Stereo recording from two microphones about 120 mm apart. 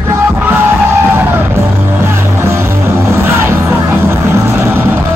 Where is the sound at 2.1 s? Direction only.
25° right (ahead or behind).